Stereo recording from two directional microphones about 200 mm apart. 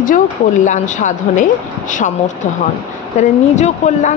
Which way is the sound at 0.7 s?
40° left (ahead or behind).